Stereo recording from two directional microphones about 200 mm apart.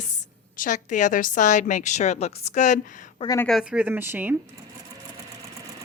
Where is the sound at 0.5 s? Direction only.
40° left (ahead or behind).